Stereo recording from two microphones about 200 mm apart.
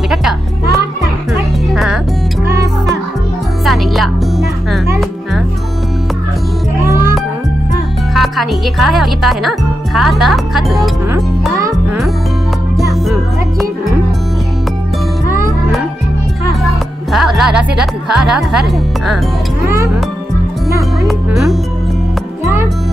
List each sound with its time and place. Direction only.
0.1 s music: centre (ahead or behind)
2.4 s music: 15° right (ahead or behind)
3.6 s music: centre (ahead or behind)
8.1 s music: centre (ahead or behind)
17.1 s speech: centre (ahead or behind)
21.0 s music: centre (ahead or behind)